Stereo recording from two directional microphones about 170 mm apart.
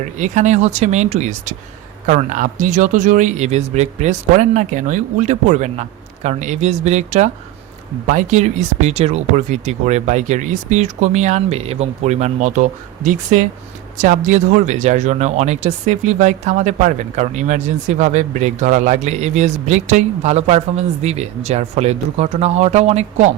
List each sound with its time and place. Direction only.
0.0 s speech: 45° right (ahead or behind)